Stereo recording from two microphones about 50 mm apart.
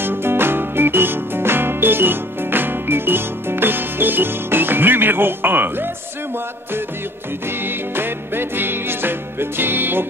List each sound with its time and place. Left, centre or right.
0.0 s music: right
7.4 s music: right